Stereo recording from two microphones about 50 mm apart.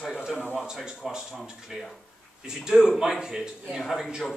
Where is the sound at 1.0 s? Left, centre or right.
Centre.